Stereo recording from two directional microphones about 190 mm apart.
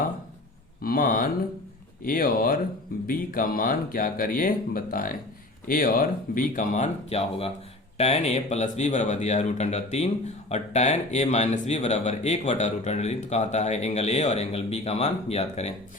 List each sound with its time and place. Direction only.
0.8 s speech: 50° left (ahead or behind)